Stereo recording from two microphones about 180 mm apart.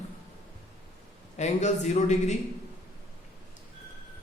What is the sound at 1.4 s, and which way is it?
Speech, 40° left (ahead or behind).